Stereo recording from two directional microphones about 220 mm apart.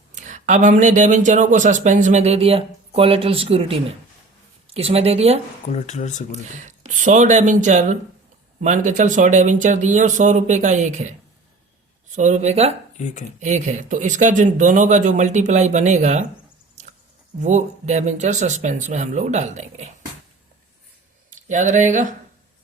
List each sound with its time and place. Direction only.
0.1 s a woman's voice: 35° right (ahead or behind)
5.6 s speech: 35° left (ahead or behind)
6.3 s speech: 35° right (ahead or behind)
12.1 s speech: 35° right (ahead or behind)
16.8 s a sound: 30° right (ahead or behind)
17.4 s speech: 30° right (ahead or behind)
21.2 s speech: 35° right (ahead or behind)